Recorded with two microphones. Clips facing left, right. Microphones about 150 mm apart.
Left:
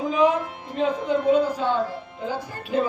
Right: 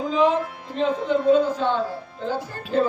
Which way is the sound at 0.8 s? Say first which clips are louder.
Right 1 dB; 10° left (ahead or behind).